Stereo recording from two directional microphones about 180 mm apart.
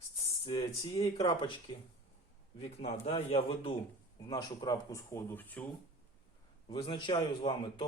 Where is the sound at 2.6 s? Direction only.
35° left (ahead or behind); by 5.6 s 10° left (ahead or behind).